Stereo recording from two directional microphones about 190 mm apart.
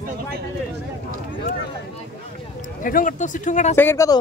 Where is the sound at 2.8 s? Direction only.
45° left (ahead or behind).